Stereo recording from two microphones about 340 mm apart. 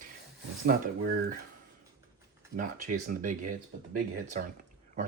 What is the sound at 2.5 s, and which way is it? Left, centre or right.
Speech, right.